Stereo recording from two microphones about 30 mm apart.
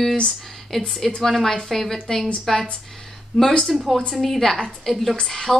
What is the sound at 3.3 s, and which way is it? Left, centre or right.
Speech, centre.